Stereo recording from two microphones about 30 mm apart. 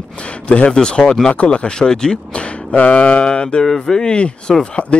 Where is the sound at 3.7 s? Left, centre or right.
Centre.